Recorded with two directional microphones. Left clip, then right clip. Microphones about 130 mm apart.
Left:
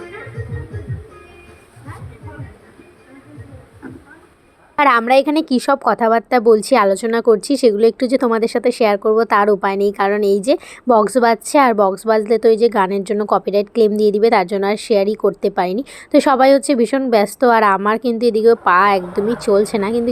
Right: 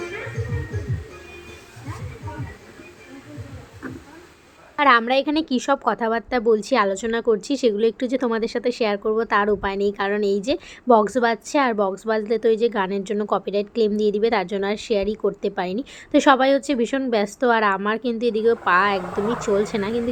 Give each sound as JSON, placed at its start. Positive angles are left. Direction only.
{"t": 4.8, "sound": "a woman's voice", "side_deg": 35}